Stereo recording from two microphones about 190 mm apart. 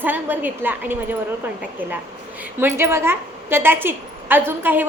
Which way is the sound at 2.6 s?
15° right (ahead or behind).